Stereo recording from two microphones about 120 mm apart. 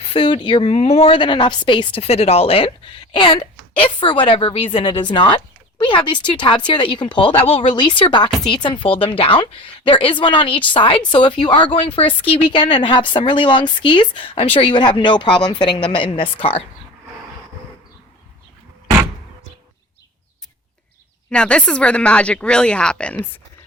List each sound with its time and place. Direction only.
0.0 s speech: 50° left (ahead or behind)
0.7 s a woman's voice: 60° left (ahead or behind)
3.1 s a woman's voice: 40° left (ahead or behind)
12.5 s a woman's voice: 40° left (ahead or behind)
21.2 s speech: 10° left (ahead or behind)